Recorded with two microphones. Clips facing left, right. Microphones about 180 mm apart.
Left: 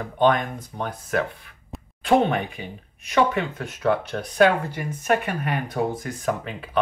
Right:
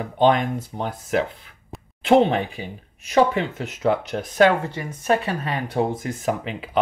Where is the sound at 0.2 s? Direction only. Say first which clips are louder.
Right 2 dB; 25° right (ahead or behind).